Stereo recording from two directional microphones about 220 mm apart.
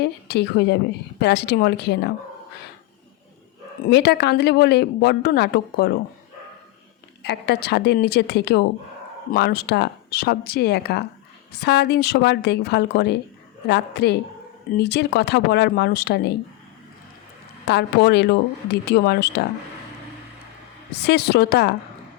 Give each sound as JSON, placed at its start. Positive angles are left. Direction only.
{"t": 0.0, "sound": "speech", "side_deg": 50}
{"t": 3.8, "sound": "speech", "side_deg": 50}
{"t": 7.2, "sound": "speech", "side_deg": 50}
{"t": 17.7, "sound": "speech", "side_deg": 50}
{"t": 20.9, "sound": "speech", "side_deg": 50}